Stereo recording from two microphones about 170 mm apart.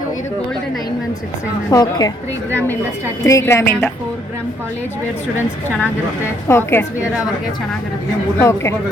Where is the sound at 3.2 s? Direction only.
20° left (ahead or behind).